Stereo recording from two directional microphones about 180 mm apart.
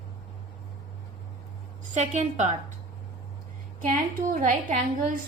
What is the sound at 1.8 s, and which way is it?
Speech, 40° right (ahead or behind).